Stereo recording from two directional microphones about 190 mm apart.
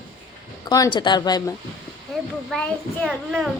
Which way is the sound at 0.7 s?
20° left (ahead or behind).